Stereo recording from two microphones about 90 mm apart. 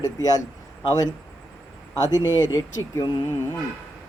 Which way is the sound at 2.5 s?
40° left (ahead or behind).